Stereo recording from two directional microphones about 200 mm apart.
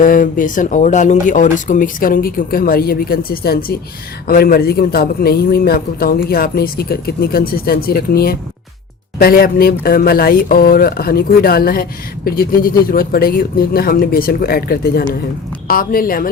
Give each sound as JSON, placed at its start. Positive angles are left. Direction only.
{"t": 0.0, "sound": "speech", "side_deg": 45}